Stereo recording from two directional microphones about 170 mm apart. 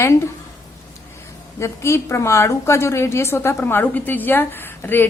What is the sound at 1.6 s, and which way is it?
A woman's voice, 15° left (ahead or behind).